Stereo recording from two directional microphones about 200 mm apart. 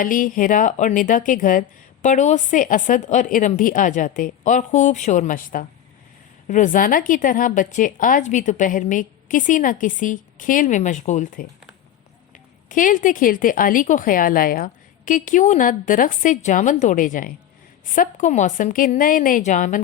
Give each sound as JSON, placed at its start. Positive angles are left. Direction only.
{"t": 0.0, "sound": "speech", "side_deg": 45}